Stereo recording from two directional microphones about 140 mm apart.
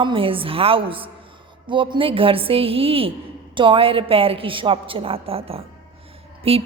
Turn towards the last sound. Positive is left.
turn(degrees=-45)  # may be behind; listen again after turning